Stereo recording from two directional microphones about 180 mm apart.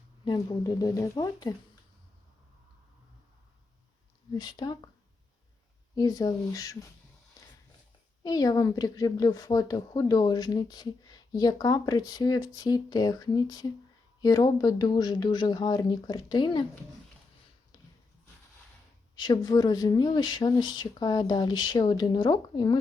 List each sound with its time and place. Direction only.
0.3 s a woman's voice: 20° left (ahead or behind)
4.4 s a woman's voice: 25° left (ahead or behind)
5.9 s a woman's voice: 20° left (ahead or behind)
8.2 s a woman's voice: 20° left (ahead or behind)
19.1 s a woman's voice: 20° left (ahead or behind)